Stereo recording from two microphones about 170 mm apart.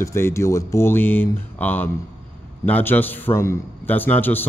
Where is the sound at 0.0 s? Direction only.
15° left (ahead or behind).